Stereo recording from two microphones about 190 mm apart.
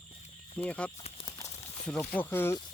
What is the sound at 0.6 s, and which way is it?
Speech, 5° left (ahead or behind).